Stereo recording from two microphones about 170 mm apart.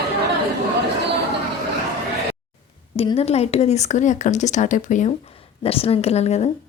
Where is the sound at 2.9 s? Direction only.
35° left (ahead or behind).